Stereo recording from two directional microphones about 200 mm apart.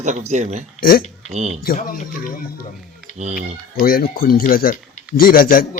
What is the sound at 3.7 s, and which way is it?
Speech, 45° left (ahead or behind).